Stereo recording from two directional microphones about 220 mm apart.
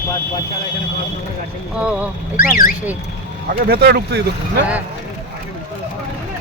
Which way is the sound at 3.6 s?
45° right (ahead or behind).